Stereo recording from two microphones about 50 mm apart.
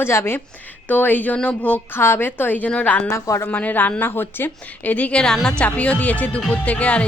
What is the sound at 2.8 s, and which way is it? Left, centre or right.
A woman's voice, left.